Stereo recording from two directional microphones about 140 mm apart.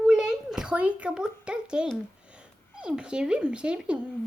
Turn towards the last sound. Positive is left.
turn(degrees=-5)  # may be behind; listen again after turning